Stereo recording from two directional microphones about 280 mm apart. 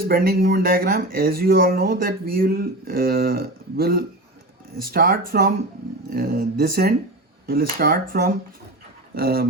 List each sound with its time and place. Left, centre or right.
0.1 s speech: right